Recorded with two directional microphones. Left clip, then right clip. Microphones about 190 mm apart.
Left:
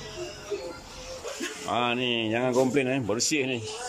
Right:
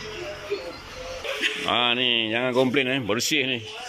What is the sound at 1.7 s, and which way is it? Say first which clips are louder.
Speech: right 4 dB; 5° left (ahead or behind).